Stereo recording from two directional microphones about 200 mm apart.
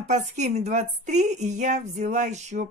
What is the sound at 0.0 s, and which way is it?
A woman's voice, 35° right (ahead or behind).